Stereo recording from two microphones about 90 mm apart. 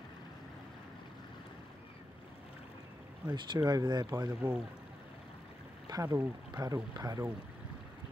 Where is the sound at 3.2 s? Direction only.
50° right (ahead or behind).